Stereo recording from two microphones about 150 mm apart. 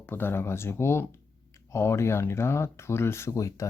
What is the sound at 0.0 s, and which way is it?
Speech, 15° left (ahead or behind).